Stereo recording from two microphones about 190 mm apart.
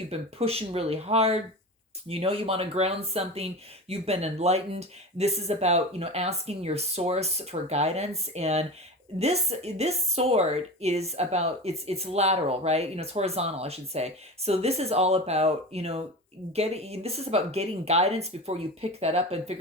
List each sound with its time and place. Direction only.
0.1 s speech: 30° right (ahead or behind)